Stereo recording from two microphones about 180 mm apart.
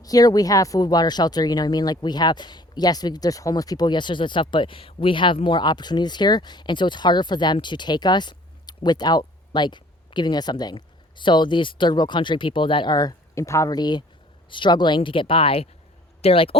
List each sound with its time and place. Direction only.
0.0 s speech: 20° left (ahead or behind)